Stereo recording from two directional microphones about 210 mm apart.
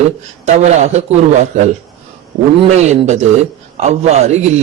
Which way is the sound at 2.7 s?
30° right (ahead or behind).